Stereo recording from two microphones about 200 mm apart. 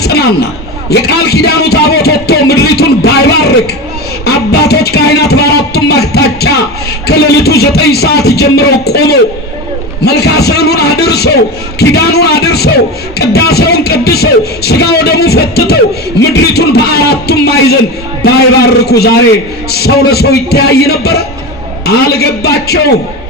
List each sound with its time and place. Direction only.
0.0 s a man's voice: 55° left (ahead or behind)